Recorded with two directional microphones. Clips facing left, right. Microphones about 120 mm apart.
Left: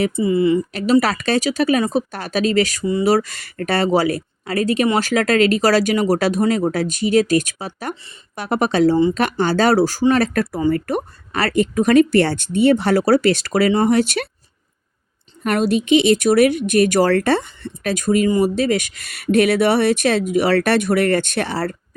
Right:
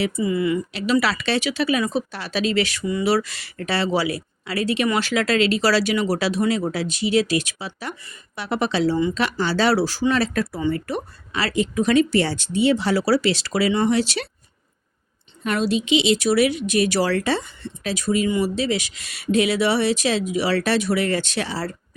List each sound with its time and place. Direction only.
0.2 s a woman's voice: 30° left (ahead or behind)
0.7 s speech: 45° left (ahead or behind)
15.4 s speech: 50° left (ahead or behind)